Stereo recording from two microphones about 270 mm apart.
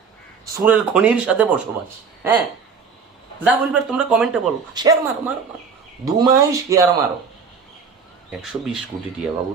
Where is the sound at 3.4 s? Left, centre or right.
Centre.